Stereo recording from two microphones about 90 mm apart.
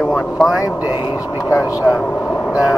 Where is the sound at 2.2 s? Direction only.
10° left (ahead or behind).